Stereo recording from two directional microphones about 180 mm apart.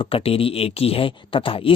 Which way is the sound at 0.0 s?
30° left (ahead or behind).